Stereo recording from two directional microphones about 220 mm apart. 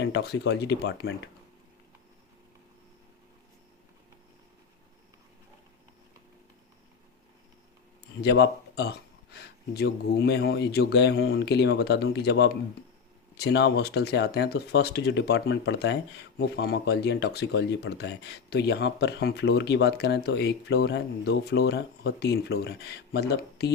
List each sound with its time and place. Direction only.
0.0 s speech: 50° left (ahead or behind)
8.2 s speech: 50° left (ahead or behind)